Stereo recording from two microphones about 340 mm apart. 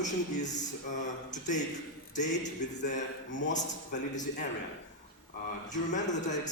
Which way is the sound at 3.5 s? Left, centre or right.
Left.